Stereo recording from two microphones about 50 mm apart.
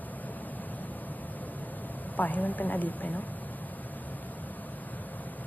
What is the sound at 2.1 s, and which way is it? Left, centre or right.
A woman's voice, left.